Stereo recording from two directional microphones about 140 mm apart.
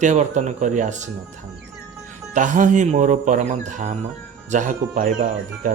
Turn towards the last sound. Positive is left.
turn(degrees=-65)  # may be behind; listen again after turning